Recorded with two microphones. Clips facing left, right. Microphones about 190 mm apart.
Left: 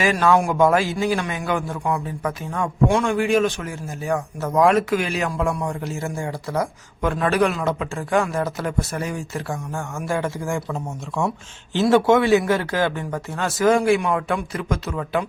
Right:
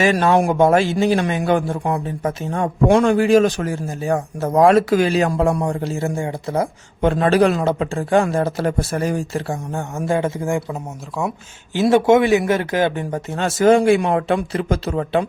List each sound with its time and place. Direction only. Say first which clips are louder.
0.0 s a man's voice: right 3 dB; 25° right (ahead or behind)